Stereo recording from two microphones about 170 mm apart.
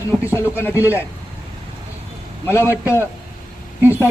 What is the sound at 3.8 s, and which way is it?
Speech, 10° right (ahead or behind).